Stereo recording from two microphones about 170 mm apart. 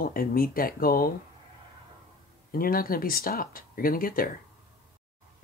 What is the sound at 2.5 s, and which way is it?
Speech, 60° left (ahead or behind).